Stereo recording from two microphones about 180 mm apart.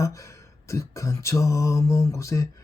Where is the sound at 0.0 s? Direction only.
15° left (ahead or behind).